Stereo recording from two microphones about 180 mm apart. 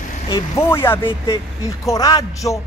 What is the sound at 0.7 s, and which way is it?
A man's voice, 15° left (ahead or behind).